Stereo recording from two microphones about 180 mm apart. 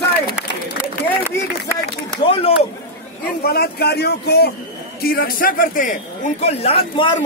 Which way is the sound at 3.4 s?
60° left (ahead or behind).